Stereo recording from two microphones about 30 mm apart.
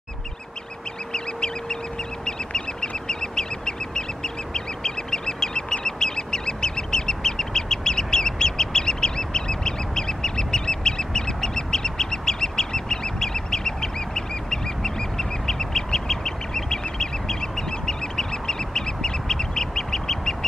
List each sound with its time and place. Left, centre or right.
1.1 s bird: left
2.2 s duck: left